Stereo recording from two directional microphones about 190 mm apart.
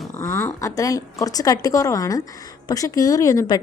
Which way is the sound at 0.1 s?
15° left (ahead or behind).